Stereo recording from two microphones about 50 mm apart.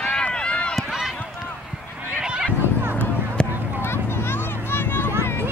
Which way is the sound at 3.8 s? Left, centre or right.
Left.